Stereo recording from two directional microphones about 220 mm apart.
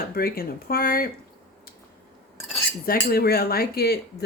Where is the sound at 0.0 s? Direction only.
40° left (ahead or behind).